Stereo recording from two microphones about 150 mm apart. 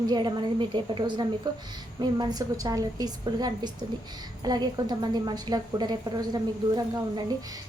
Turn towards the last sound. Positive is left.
turn(degrees=-30)  # may be behind; listen again after turning